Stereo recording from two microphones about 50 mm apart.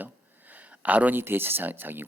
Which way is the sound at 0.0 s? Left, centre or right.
Right.